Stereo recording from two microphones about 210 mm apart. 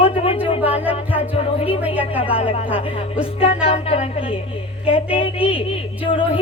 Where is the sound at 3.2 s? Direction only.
25° left (ahead or behind).